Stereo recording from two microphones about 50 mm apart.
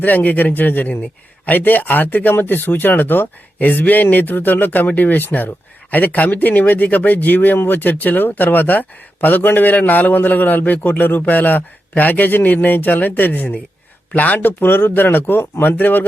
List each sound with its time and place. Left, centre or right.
0.0 s speech: left